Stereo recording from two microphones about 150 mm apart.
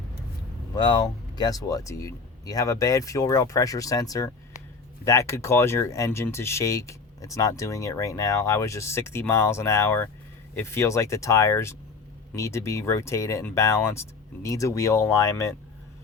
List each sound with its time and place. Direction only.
0.8 s speech: 30° left (ahead or behind)